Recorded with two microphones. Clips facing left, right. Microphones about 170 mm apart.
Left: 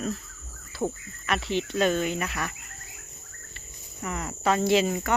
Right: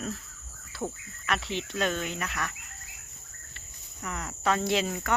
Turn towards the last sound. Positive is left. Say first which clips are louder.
# left 5 dB
turn(degrees=5)  # may be behind; listen again after turning